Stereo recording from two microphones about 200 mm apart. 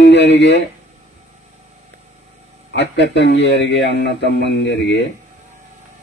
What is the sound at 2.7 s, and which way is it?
Speech, 60° left (ahead or behind).